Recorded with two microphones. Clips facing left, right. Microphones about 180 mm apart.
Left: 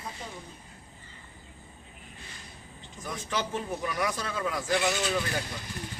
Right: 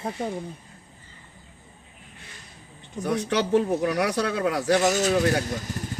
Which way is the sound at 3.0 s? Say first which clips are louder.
Right 9 dB; 70° right (ahead or behind).